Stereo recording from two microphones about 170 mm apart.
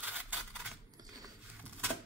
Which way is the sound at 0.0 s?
10° right (ahead or behind).